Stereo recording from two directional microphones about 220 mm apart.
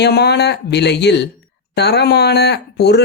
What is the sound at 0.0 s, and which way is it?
Speech, 50° left (ahead or behind).